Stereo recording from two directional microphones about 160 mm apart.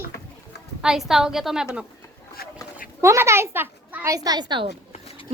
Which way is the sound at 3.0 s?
15° right (ahead or behind).